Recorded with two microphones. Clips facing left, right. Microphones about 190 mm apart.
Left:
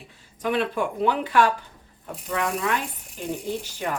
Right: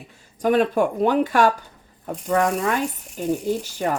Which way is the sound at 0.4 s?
45° right (ahead or behind).